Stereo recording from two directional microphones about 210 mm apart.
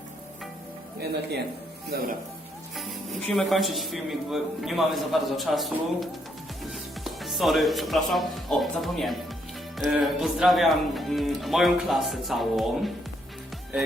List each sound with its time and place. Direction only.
1.9 s speech: 45° right (ahead or behind)
2.7 s speech: centre (ahead or behind)